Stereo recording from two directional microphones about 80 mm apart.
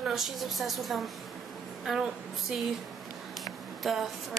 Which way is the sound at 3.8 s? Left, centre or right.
Centre.